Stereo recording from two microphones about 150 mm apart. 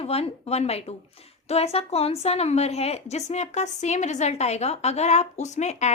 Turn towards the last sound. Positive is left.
turn(degrees=50)  # may be behind; listen again after turning